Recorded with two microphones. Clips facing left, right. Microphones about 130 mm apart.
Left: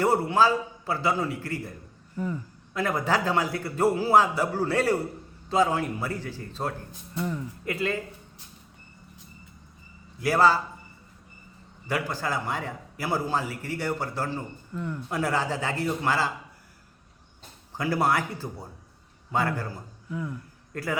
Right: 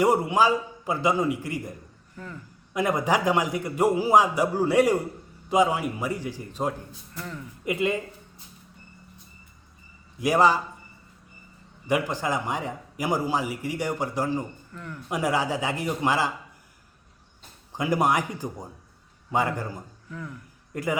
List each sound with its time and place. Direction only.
0.0 s a man's voice: 15° right (ahead or behind)
2.1 s speech: 15° left (ahead or behind)
2.7 s a man's voice: 15° right (ahead or behind)
7.1 s speech: 20° left (ahead or behind)
7.6 s a man's voice: 15° right (ahead or behind)
10.2 s a man's voice: 15° right (ahead or behind)
11.9 s a man's voice: 20° right (ahead or behind)
14.7 s speech: 15° left (ahead or behind)
15.1 s a man's voice: 15° right (ahead or behind)
17.7 s a man's voice: 15° right (ahead or behind)
20.1 s speech: 15° left (ahead or behind)
20.7 s a man's voice: 15° right (ahead or behind)